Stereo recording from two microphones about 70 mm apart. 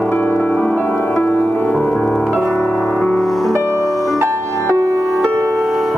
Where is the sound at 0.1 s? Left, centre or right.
Left.